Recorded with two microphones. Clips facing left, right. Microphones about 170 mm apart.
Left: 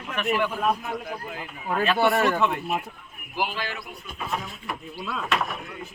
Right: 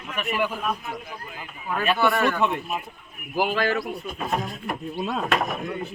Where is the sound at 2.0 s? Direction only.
30° left (ahead or behind).